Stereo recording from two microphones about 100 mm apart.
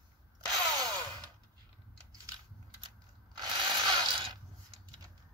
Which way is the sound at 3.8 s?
45° right (ahead or behind).